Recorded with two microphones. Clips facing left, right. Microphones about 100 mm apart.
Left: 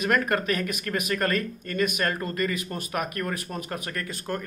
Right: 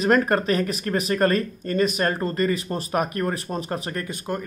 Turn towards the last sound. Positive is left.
turn(degrees=-15)  # may be behind; listen again after turning